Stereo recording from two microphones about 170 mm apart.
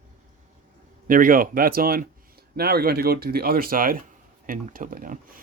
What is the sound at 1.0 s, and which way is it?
Speech, 55° right (ahead or behind).